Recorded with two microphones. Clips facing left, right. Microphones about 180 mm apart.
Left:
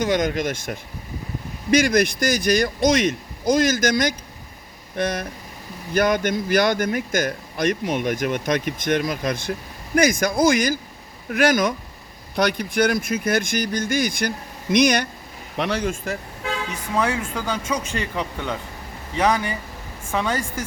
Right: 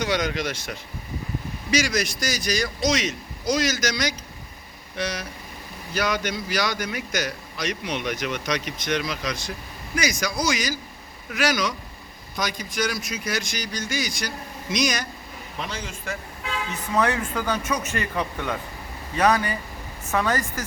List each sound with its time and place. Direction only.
0.0 s a man's voice: 50° left (ahead or behind); by 15.9 s 70° left (ahead or behind)
16.9 s speech: 10° left (ahead or behind)